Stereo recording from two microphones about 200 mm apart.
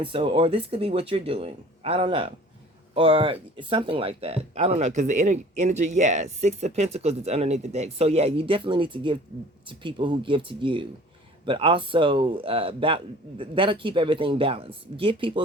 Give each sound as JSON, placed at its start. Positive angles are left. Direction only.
{"t": 0.0, "sound": "speech", "side_deg": -25}